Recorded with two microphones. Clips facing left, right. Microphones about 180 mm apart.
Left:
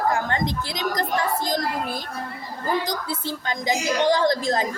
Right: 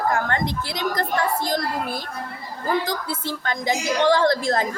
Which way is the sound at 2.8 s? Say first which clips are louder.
Right 1 dB; 15° left (ahead or behind).